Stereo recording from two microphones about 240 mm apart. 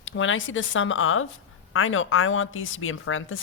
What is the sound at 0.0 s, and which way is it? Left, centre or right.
A woman's voice, left.